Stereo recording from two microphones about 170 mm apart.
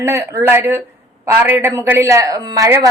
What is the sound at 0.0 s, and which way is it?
A woman's voice, 15° right (ahead or behind).